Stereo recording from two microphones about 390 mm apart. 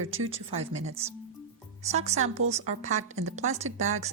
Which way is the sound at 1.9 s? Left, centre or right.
Centre.